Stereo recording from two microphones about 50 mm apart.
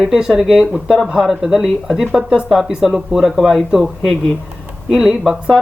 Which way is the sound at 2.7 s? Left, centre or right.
Centre.